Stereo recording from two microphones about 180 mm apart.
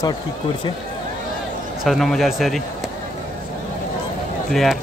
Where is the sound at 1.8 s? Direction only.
Centre (ahead or behind).